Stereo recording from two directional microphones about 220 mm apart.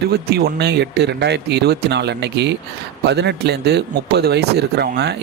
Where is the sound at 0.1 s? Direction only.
45° right (ahead or behind).